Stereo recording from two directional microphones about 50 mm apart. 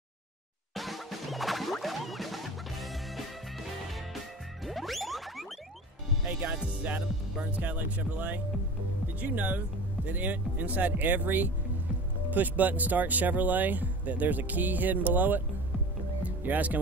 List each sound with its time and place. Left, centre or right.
0.7 s music: centre
4.6 s whoosh: centre
6.2 s speech: right
16.2 s music: right